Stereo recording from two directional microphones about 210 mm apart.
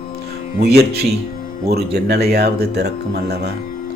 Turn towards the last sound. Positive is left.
turn(degrees=-50)  # may be behind; listen again after turning